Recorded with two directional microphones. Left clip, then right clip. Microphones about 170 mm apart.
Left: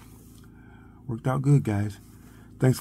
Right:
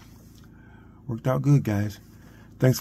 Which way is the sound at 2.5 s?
5° right (ahead or behind).